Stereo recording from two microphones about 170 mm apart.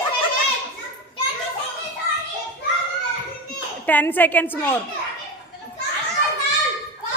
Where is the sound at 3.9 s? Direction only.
10° left (ahead or behind).